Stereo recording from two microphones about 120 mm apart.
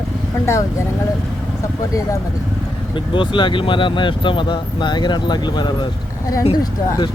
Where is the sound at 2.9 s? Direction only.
45° left (ahead or behind).